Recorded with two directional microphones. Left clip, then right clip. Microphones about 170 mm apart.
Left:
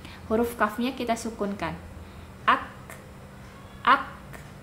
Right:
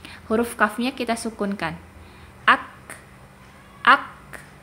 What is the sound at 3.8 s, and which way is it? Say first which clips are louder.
Speech: right 5 dB; 25° right (ahead or behind).